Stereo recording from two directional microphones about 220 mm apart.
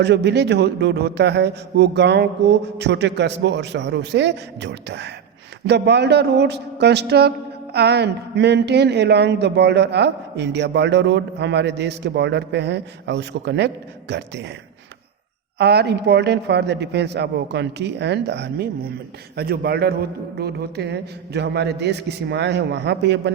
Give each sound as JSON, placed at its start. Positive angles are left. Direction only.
{"t": 0.0, "sound": "speech", "side_deg": -50}
{"t": 15.5, "sound": "speech", "side_deg": -50}